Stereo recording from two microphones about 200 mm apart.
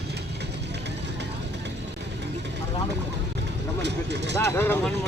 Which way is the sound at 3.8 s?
60° right (ahead or behind).